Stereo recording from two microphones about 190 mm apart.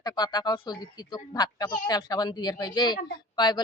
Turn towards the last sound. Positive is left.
turn(degrees=20)  # may be behind; listen again after turning